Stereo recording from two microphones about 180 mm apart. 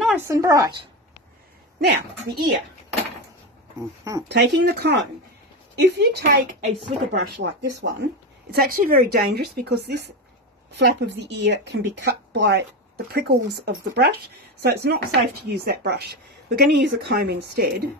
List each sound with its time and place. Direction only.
0.1 s a woman's voice: 15° right (ahead or behind)
1.8 s speech: 65° right (ahead or behind)
4.3 s speech: 75° right (ahead or behind)
8.5 s speech: 55° right (ahead or behind)